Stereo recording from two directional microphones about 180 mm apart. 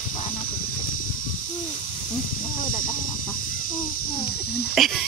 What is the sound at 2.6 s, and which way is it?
Chicken, 50° left (ahead or behind).